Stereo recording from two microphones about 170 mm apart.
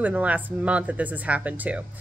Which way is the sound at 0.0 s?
10° right (ahead or behind).